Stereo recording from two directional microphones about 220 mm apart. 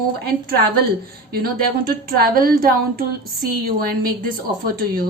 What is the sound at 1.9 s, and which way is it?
Speech, 40° right (ahead or behind).